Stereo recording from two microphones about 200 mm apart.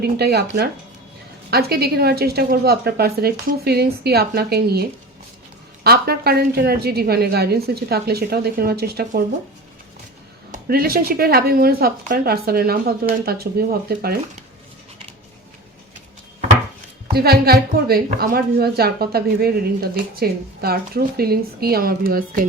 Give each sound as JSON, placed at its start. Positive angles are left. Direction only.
{"t": 0.0, "sound": "a woman's voice", "side_deg": -55}
{"t": 1.5, "sound": "a woman's voice", "side_deg": -50}
{"t": 10.5, "sound": "a woman's voice", "side_deg": -50}
{"t": 17.2, "sound": "a woman's voice", "side_deg": -50}